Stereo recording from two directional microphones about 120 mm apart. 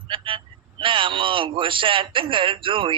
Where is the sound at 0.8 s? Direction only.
45° right (ahead or behind).